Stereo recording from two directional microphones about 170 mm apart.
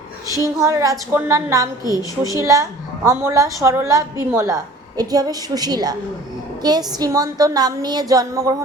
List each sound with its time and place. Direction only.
0.4 s a woman's voice: 20° right (ahead or behind)
1.8 s a woman's voice: 20° left (ahead or behind)
2.5 s a woman's voice: 20° right (ahead or behind)